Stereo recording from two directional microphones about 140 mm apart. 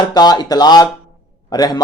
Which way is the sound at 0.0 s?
30° left (ahead or behind).